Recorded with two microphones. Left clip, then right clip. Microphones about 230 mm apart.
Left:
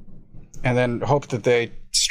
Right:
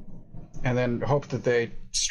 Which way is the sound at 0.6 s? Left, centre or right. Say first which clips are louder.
Left 5 dB; left.